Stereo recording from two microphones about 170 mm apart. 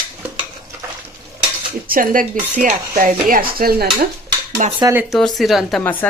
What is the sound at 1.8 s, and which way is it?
Speech, 55° right (ahead or behind).